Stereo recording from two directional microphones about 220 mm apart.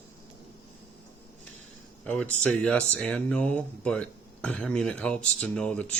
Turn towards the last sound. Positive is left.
turn(degrees=5)  # may be behind; listen again after turning